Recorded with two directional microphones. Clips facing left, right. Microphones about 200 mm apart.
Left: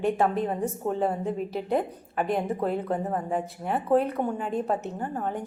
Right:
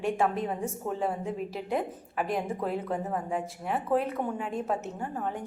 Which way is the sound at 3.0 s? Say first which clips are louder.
Left 3 dB; 35° left (ahead or behind).